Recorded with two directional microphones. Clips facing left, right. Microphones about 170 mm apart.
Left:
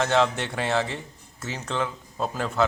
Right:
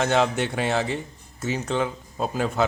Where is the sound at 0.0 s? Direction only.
15° right (ahead or behind).